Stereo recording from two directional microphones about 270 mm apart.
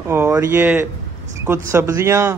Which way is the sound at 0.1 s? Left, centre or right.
Centre.